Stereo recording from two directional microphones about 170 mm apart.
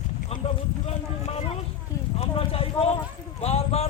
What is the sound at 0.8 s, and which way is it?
Speech, 35° left (ahead or behind).